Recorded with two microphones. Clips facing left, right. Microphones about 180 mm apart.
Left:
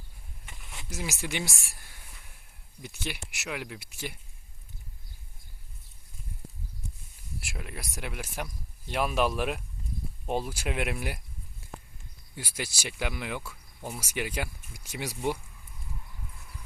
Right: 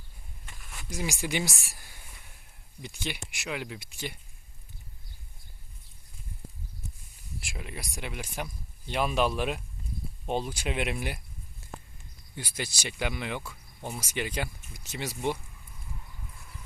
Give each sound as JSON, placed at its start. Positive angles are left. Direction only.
{"t": 0.4, "sound": "a sound", "side_deg": 20}
{"t": 0.9, "sound": "speech", "side_deg": 5}
{"t": 7.3, "sound": "speech", "side_deg": 5}
{"t": 12.4, "sound": "speech", "side_deg": 10}